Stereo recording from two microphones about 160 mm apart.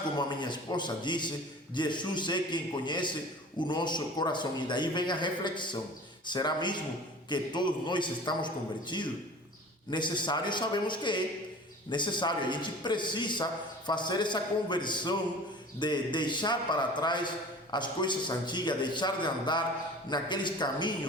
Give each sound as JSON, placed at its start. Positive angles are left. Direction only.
{"t": 0.2, "sound": "a man's voice", "side_deg": 30}